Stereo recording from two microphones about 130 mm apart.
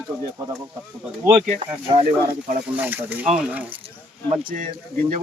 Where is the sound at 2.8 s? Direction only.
15° right (ahead or behind).